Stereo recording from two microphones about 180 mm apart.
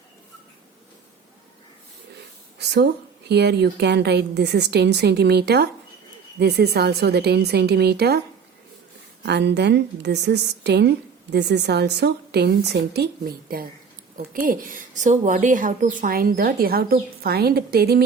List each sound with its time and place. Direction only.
2.6 s a woman's voice: 65° right (ahead or behind)
9.2 s a woman's voice: 70° right (ahead or behind)